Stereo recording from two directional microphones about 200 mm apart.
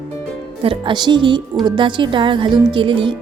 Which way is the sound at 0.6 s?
25° right (ahead or behind).